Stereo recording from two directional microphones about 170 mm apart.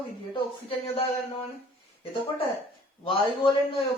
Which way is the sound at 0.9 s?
35° left (ahead or behind).